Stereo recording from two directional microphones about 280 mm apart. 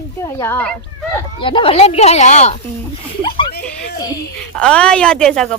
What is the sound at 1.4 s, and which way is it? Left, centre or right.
Speech, centre.